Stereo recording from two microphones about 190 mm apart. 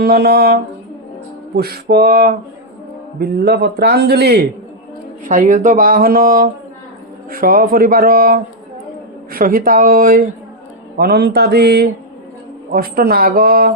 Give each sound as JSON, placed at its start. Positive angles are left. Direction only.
{"t": 0.0, "sound": "a man's voice", "side_deg": -55}
{"t": 5.2, "sound": "a man's voice", "side_deg": -45}